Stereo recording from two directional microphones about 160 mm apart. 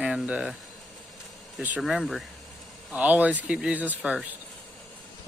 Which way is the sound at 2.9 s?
10° right (ahead or behind).